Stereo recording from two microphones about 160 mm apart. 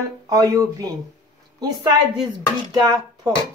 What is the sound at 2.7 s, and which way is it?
Speech, 25° right (ahead or behind).